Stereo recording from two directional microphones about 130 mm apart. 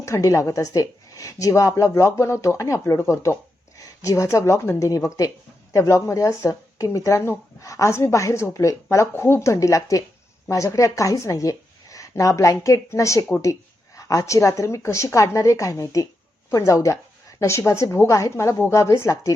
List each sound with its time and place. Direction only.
0.0 s a woman's voice: 25° left (ahead or behind)